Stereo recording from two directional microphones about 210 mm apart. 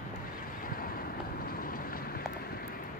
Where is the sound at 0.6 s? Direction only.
45° left (ahead or behind).